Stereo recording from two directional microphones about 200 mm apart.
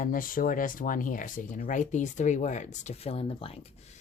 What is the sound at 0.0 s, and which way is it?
Speech, 45° left (ahead or behind).